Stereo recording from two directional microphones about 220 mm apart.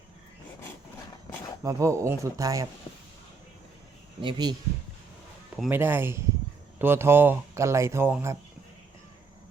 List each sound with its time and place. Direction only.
1.6 s speech: 15° right (ahead or behind)
4.2 s speech: 20° right (ahead or behind)
5.5 s speech: 5° right (ahead or behind)